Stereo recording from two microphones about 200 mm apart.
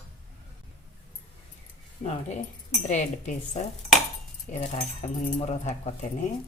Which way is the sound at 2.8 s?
40° left (ahead or behind).